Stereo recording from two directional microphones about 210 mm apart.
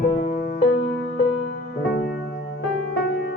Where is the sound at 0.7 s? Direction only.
65° left (ahead or behind).